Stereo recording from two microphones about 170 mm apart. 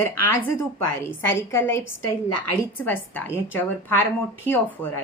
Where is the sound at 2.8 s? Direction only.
10° left (ahead or behind).